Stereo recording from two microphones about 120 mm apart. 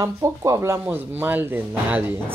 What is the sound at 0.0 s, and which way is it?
Speech, 25° right (ahead or behind).